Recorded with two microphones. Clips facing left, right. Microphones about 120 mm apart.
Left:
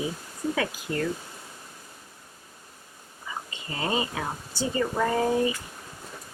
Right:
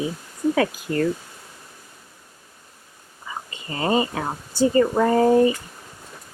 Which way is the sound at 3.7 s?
45° right (ahead or behind).